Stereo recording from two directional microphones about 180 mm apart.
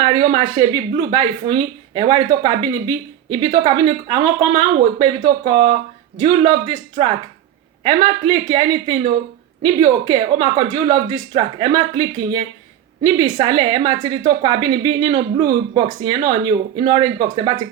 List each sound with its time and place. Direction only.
0.0 s speech: 30° right (ahead or behind)